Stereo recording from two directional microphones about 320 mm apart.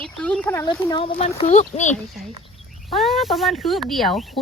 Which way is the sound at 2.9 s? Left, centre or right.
Centre.